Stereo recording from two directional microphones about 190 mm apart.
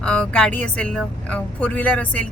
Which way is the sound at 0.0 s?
5° left (ahead or behind).